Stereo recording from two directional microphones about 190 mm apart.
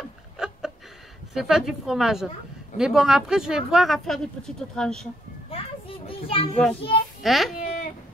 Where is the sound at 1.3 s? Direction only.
Centre (ahead or behind).